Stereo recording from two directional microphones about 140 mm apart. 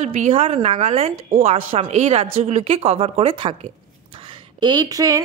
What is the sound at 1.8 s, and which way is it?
A woman's voice, 55° right (ahead or behind).